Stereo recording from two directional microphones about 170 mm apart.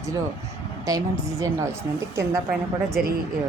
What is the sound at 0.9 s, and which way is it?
Speech, 20° right (ahead or behind).